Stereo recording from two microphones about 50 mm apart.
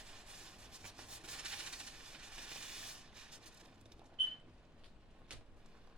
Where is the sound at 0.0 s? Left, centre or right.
Centre.